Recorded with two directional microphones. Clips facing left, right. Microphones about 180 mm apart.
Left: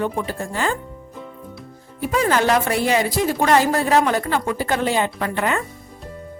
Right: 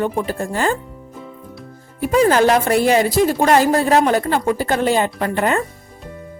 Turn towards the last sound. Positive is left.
turn(degrees=-40)  # may be behind; listen again after turning